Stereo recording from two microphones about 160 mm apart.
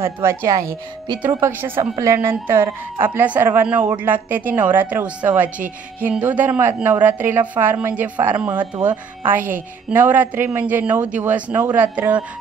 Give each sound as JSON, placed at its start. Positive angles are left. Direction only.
{"t": 0.0, "sound": "a woman's voice", "side_deg": -15}